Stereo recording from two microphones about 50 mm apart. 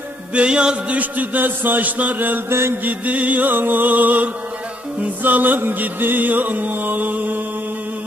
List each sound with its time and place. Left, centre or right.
0.3 s music: right
0.9 s music: right